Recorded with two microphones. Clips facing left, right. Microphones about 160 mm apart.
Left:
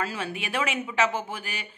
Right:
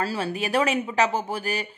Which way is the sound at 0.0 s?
35° right (ahead or behind).